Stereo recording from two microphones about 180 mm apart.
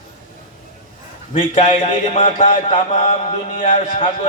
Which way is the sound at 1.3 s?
35° left (ahead or behind).